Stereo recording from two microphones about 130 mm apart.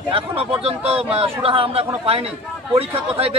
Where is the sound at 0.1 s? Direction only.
45° right (ahead or behind).